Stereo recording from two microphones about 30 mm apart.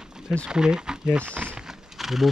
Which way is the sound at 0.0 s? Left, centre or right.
Right.